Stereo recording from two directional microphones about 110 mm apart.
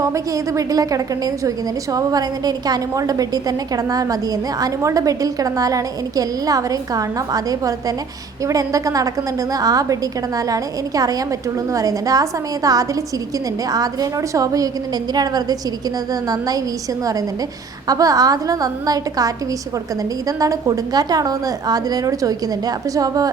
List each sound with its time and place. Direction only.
0.0 s a woman's voice: 30° right (ahead or behind)
17.8 s a woman's voice: 35° right (ahead or behind)